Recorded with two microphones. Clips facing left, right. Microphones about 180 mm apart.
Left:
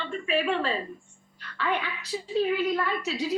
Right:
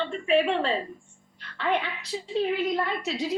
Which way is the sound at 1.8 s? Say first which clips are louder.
Even; 30° right (ahead or behind).